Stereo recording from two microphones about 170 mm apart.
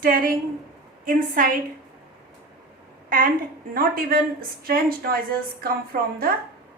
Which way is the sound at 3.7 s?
60° right (ahead or behind).